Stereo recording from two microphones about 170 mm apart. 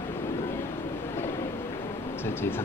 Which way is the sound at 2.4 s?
15° left (ahead or behind).